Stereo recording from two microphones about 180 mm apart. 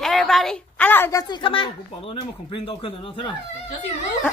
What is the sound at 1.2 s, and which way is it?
Speech, 30° left (ahead or behind).